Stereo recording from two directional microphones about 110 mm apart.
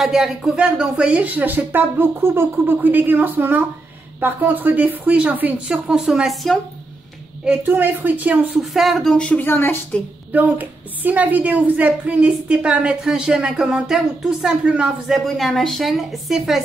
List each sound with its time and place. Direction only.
0.0 s a woman's voice: 5° right (ahead or behind)
7.4 s a woman's voice: 15° right (ahead or behind)
8.7 s a woman's voice: centre (ahead or behind); by 10.0 s 20° left (ahead or behind)
10.3 s a woman's voice: 15° right (ahead or behind)